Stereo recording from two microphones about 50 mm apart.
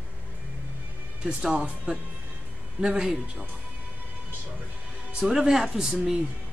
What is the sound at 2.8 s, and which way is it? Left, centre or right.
Speech, centre.